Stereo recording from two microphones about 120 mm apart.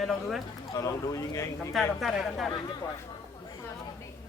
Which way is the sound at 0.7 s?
30° left (ahead or behind).